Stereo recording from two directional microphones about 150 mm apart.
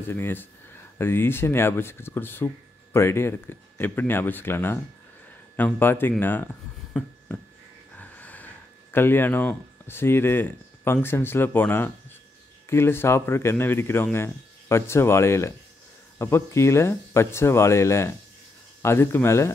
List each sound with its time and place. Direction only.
0.1 s speech: 15° left (ahead or behind)